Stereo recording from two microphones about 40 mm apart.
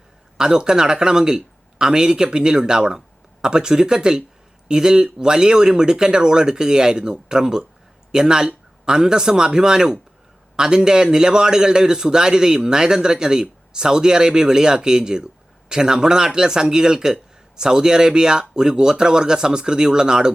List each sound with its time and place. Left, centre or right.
0.3 s a man's voice: centre